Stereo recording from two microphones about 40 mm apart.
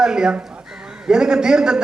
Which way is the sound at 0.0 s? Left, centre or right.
Centre.